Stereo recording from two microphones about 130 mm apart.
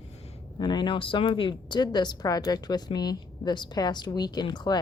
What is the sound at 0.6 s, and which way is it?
Speech, 35° left (ahead or behind).